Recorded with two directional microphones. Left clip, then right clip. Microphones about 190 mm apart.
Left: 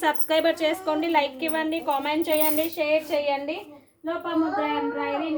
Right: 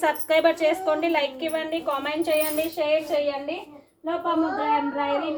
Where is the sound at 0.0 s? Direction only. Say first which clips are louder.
Right 2 dB; 25° left (ahead or behind).